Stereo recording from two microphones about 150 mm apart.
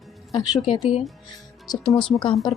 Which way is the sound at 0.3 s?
25° left (ahead or behind).